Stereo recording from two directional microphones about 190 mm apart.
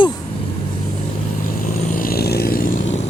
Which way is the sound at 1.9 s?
50° left (ahead or behind).